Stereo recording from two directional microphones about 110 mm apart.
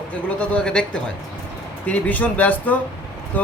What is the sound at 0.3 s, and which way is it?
Speech, 10° left (ahead or behind).